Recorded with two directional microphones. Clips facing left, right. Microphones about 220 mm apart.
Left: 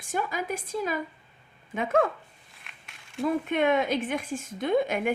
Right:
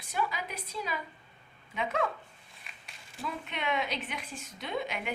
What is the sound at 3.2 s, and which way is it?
A woman's voice, 50° left (ahead or behind).